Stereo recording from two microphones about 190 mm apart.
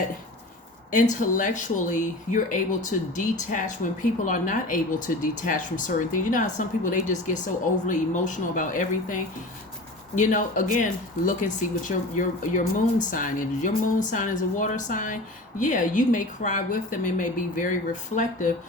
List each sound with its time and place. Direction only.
0.9 s speech: 45° left (ahead or behind)
10.2 s speech: 45° left (ahead or behind)